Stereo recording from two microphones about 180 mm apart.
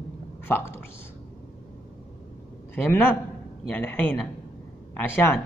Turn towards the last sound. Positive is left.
turn(degrees=10)  # may be behind; listen again after turning